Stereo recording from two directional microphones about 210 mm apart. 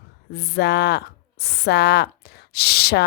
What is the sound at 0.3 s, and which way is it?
Speech, 50° left (ahead or behind).